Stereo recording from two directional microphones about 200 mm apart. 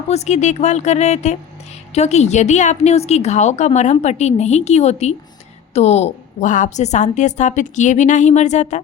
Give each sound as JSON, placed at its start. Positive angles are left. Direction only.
{"t": 0.1, "sound": "a woman's voice", "side_deg": 35}